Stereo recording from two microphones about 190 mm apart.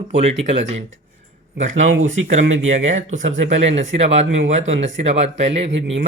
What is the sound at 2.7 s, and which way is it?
Speech, 40° right (ahead or behind).